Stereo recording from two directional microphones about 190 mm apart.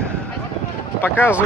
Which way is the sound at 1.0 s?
10° left (ahead or behind).